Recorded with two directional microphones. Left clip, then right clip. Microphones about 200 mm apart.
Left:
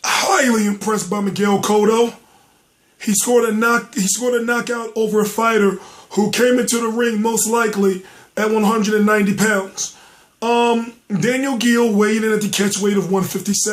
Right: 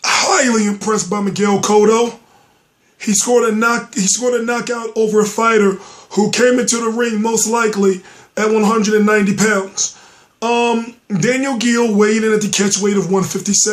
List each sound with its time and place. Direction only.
0.0 s speech: centre (ahead or behind)